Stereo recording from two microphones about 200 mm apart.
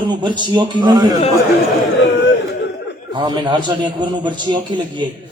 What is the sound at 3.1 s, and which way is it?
A man's voice, 20° right (ahead or behind).